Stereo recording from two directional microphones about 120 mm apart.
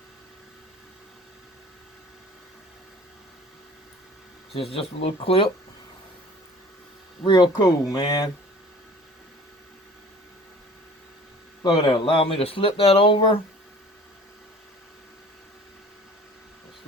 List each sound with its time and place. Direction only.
4.5 s speech: 55° left (ahead or behind)
7.2 s speech: 40° left (ahead or behind)
7.5 s speech: 30° left (ahead or behind)
11.6 s speech: 45° left (ahead or behind)